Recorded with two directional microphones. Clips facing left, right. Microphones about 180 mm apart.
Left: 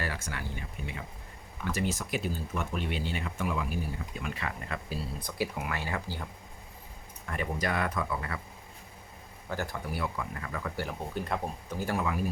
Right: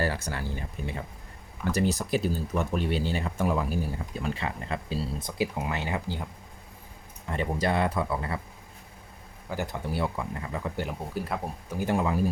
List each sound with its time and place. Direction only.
0.0 s speech: 35° right (ahead or behind); by 6.2 s 20° right (ahead or behind)
7.3 s speech: 30° right (ahead or behind)
9.5 s speech: 15° right (ahead or behind)
11.1 s speech: 5° right (ahead or behind)
11.8 s speech: 25° right (ahead or behind)